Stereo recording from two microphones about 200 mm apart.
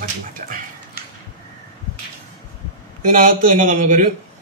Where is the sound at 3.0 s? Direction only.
45° right (ahead or behind).